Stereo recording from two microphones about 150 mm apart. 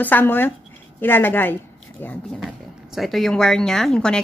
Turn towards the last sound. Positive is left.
turn(degrees=5)  # may be behind; listen again after turning